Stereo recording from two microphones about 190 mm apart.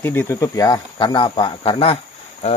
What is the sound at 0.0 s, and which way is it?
Speech, 10° left (ahead or behind).